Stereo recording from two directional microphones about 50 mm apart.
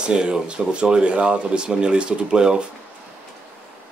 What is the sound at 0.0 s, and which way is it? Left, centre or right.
Speech, centre.